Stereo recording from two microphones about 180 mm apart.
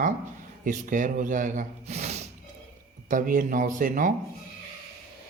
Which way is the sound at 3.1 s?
50° right (ahead or behind).